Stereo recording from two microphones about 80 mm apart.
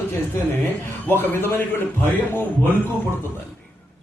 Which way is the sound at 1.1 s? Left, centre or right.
Left.